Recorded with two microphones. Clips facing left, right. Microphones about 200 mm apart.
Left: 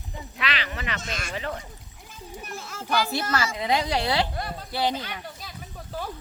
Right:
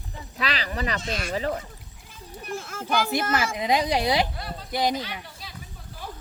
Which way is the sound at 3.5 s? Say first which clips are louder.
Right 2 dB; 15° right (ahead or behind).